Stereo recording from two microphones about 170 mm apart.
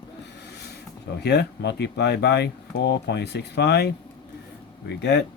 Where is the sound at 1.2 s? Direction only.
80° left.